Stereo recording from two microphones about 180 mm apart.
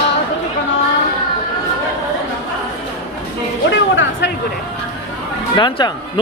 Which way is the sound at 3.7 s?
90° left.